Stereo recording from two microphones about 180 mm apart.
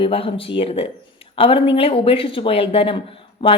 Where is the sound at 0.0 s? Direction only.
30° left (ahead or behind).